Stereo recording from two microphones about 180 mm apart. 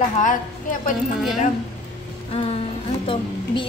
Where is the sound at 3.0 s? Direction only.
30° left (ahead or behind).